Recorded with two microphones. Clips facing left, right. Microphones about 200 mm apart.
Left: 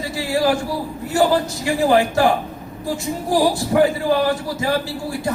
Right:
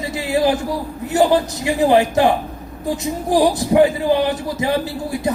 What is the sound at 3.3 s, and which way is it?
A man's voice, 20° right (ahead or behind).